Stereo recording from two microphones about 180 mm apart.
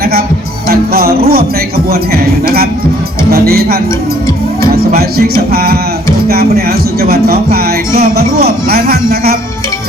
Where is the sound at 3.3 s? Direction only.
60° right (ahead or behind).